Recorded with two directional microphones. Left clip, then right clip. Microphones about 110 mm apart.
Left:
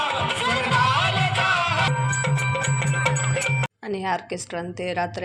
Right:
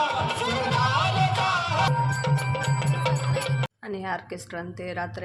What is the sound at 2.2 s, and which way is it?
Music, 30° right (ahead or behind).